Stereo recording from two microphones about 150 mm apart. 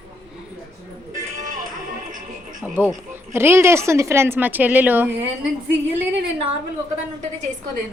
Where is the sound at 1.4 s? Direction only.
60° right (ahead or behind).